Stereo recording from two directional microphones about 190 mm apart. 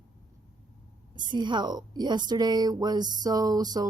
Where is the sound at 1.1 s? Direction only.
25° right (ahead or behind).